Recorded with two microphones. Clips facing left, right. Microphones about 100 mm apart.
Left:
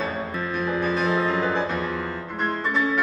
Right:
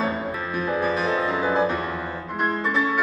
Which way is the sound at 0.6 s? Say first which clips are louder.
Right 1 dB; 10° right (ahead or behind).